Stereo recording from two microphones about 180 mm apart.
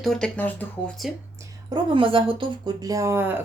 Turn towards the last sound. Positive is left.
turn(degrees=-10)  # may be behind; listen again after turning